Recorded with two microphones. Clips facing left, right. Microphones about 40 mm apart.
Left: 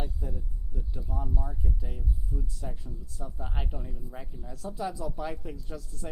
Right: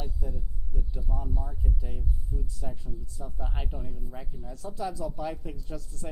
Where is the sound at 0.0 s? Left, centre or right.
Centre.